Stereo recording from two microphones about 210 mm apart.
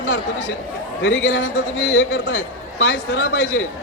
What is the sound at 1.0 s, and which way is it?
A man's voice, 65° left (ahead or behind).